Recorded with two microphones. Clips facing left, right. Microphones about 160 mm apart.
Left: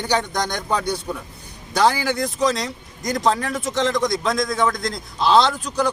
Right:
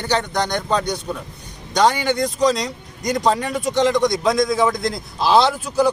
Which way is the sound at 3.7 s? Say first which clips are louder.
Right 4 dB; centre (ahead or behind).